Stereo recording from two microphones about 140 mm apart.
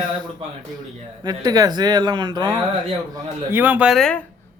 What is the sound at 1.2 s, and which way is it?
Speech, 30° right (ahead or behind).